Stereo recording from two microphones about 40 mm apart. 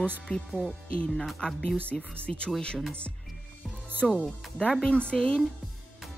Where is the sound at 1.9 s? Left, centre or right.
Centre.